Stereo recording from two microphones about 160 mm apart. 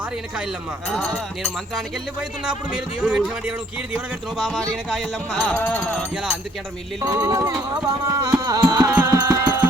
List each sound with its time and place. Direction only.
0.9 s speech: 5° left (ahead or behind)
7.0 s carnatic music: 20° right (ahead or behind)
8.9 s music: 15° right (ahead or behind)